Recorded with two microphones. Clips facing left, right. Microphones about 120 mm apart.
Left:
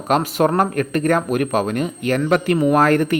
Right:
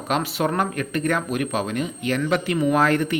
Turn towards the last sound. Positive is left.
turn(degrees=50)  # may be behind; listen again after turning